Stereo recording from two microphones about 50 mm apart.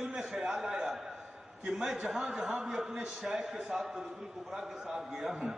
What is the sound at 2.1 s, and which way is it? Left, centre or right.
A man's voice, centre.